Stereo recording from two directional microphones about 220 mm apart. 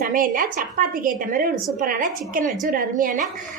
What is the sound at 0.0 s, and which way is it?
A woman's voice, 40° right (ahead or behind).